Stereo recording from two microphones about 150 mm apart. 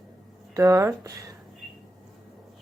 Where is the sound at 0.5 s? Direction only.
20° right (ahead or behind).